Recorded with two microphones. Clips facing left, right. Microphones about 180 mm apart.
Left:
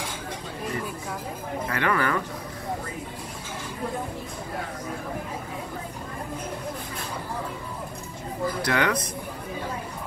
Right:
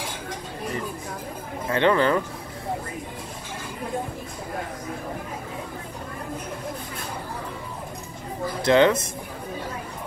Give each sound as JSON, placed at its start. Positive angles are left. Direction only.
{"t": 1.7, "sound": "speech", "side_deg": -25}
{"t": 8.6, "sound": "speech", "side_deg": -25}